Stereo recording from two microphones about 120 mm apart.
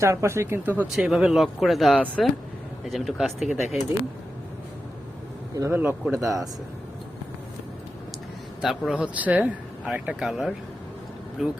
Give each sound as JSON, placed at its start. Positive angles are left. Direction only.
{"t": 0.0, "sound": "speech", "side_deg": -25}
{"t": 5.5, "sound": "speech", "side_deg": -25}
{"t": 8.6, "sound": "speech", "side_deg": 0}